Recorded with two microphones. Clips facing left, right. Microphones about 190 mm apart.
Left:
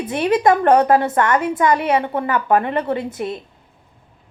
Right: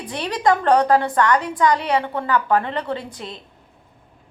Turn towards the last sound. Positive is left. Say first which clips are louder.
# left 5 dB
turn(degrees=20)  # may be behind; listen again after turning